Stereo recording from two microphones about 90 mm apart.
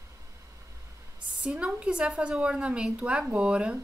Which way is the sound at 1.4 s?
10° right (ahead or behind).